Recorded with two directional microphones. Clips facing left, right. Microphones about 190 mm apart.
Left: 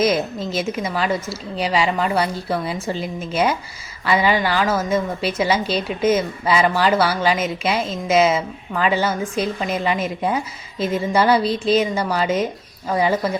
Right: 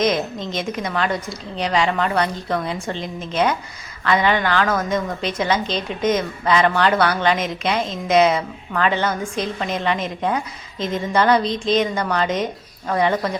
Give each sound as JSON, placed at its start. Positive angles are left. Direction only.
{"t": 0.0, "sound": "a woman's voice", "side_deg": 5}